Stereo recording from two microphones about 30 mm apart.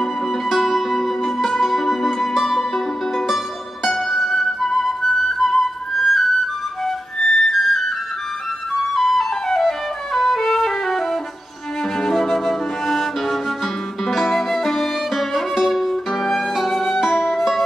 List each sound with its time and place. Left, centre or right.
0.5 s music: centre
3.8 s music: centre
5.0 s flute: centre
7.2 s music: left
8.9 s flute: centre
9.6 s music: centre
11.8 s music: centre
17.0 s music: centre